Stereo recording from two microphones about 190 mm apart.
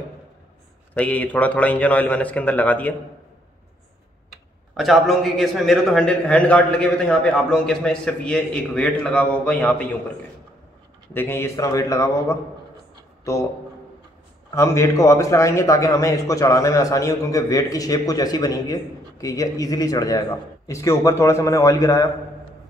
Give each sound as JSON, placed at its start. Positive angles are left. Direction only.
{"t": 0.9, "sound": "a man's voice", "side_deg": 5}
{"t": 4.7, "sound": "a man's voice", "side_deg": 0}
{"t": 11.1, "sound": "a man's voice", "side_deg": 15}
{"t": 14.5, "sound": "a man's voice", "side_deg": 15}